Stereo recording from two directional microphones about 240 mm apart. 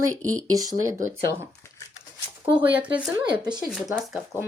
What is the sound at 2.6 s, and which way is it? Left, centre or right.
Speech, centre.